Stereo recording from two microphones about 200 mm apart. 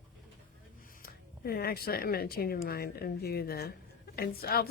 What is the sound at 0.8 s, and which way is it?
A woman's voice, 45° left (ahead or behind).